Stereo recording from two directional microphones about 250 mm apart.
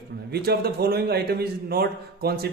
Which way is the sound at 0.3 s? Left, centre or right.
Right.